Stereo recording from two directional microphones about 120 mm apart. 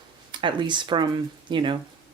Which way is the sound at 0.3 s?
40° right (ahead or behind).